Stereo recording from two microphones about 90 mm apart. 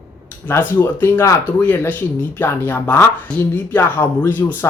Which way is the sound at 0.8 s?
25° left (ahead or behind).